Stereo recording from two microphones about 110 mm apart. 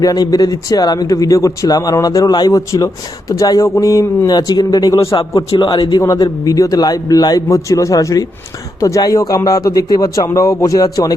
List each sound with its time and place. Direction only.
0.0 s speech: 35° left (ahead or behind)
4.3 s a man's voice: 40° left (ahead or behind)